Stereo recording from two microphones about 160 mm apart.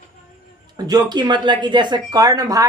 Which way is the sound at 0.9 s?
25° right (ahead or behind).